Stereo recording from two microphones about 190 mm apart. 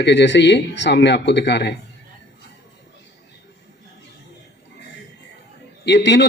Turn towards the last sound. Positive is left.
turn(degrees=65)  # may be behind; listen again after turning